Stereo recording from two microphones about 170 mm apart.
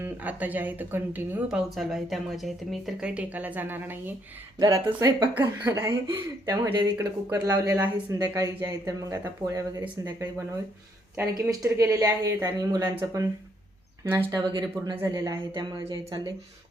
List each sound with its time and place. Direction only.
0.0 s speech: 10° right (ahead or behind)
4.6 s speech: 20° right (ahead or behind)
5.9 s speech: 25° right (ahead or behind)